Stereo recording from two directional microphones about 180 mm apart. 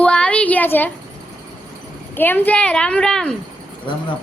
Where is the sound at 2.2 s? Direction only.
10° left (ahead or behind).